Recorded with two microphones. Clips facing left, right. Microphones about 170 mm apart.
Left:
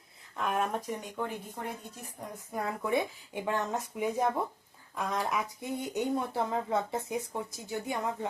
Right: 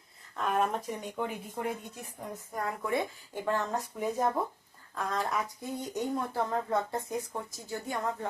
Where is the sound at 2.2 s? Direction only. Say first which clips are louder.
Even; 10° left (ahead or behind).